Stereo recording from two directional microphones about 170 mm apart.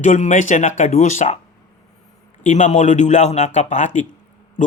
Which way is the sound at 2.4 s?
45° left (ahead or behind).